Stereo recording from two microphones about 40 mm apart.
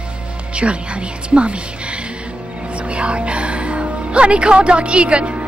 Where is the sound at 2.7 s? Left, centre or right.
Right.